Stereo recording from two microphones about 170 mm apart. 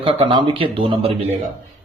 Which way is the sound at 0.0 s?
30° right (ahead or behind).